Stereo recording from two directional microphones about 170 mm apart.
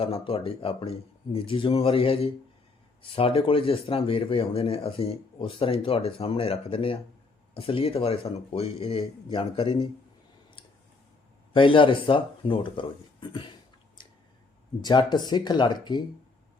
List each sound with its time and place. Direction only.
0.0 s speech: 35° left (ahead or behind)
11.5 s speech: 30° left (ahead or behind)
14.0 s a sound: 25° left (ahead or behind)
14.8 s speech: 25° left (ahead or behind)